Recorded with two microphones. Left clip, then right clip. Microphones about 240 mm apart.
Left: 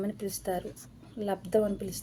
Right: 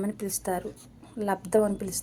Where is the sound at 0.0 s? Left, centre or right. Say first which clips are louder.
Right 2 dB; centre.